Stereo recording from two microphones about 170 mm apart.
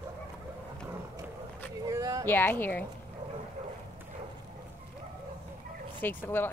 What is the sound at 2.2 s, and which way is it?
Speech, 10° left (ahead or behind).